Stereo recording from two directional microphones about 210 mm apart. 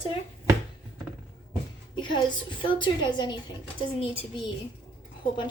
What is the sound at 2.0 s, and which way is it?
A woman's voice, 20° left (ahead or behind).